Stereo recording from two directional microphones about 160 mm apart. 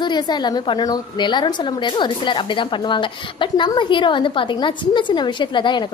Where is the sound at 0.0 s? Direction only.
25° left (ahead or behind).